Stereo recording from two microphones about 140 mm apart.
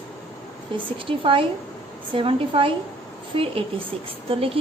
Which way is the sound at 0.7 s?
40° right (ahead or behind).